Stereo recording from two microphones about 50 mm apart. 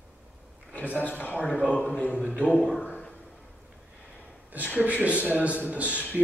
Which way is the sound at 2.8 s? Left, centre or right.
Left.